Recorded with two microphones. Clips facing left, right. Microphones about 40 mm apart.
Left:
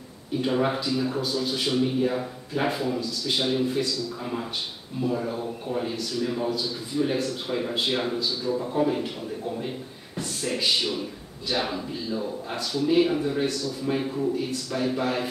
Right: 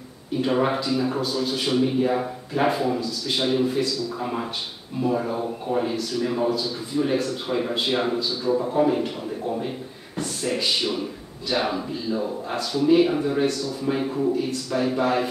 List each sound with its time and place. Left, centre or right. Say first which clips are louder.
0.4 s speech: right 3 dB; centre
5.0 s speech: right 3 dB; centre
5.8 s speech: right 3 dB; centre
10.1 s speech: right 3 dB; centre